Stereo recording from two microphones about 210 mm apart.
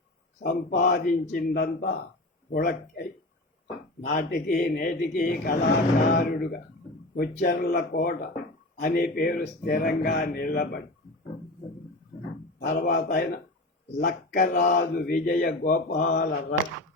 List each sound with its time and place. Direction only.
0.4 s speech: 45° left (ahead or behind)
12.5 s speech: 45° left (ahead or behind)